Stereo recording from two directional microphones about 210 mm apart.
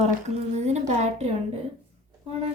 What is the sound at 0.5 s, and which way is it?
Speech, 35° right (ahead or behind).